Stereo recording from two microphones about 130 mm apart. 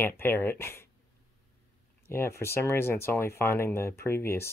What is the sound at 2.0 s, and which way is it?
Speech, 20° left (ahead or behind).